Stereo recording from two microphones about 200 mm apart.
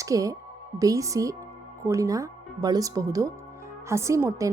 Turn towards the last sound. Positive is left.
turn(degrees=-15)  # may be behind; listen again after turning